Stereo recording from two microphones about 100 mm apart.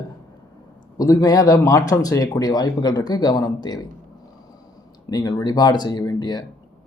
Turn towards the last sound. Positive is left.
turn(degrees=45)  # may be behind; listen again after turning